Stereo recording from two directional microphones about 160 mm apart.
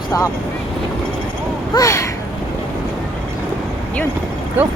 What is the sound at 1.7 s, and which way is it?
Speech, 20° left (ahead or behind).